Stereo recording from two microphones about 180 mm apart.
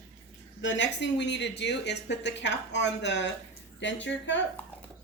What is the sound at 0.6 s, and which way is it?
Speech, 80° left.